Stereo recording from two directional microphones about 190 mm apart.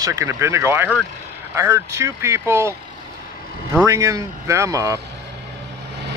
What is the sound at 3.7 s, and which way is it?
Speech, 15° right (ahead or behind).